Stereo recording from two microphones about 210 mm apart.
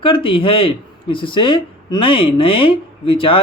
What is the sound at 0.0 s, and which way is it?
Speech, 25° left (ahead or behind).